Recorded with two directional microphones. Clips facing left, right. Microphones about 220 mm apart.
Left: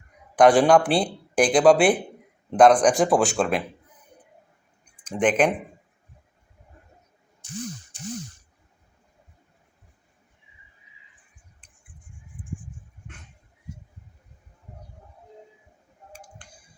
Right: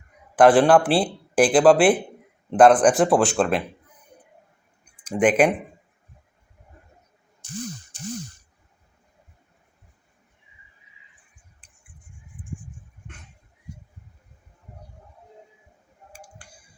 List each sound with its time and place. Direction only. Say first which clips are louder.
0.3 s speech: right 1 dB; 5° right (ahead or behind)
5.0 s speech: right 3 dB; 10° right (ahead or behind)
12.4 s a sound: left 1 dB; 25° left (ahead or behind)
16.4 s music: right 1 dB; 10° right (ahead or behind)